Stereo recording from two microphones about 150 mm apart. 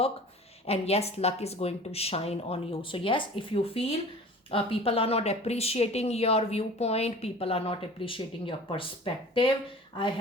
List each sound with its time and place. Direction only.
0.7 s a woman's voice: 45° left (ahead or behind)